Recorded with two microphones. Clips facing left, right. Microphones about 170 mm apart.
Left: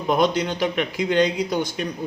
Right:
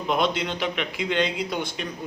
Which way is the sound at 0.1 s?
40° left (ahead or behind).